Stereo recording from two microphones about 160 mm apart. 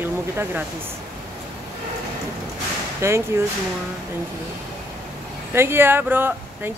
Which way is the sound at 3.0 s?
15° right (ahead or behind).